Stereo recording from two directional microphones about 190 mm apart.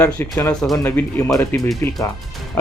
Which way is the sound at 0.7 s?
15° left (ahead or behind).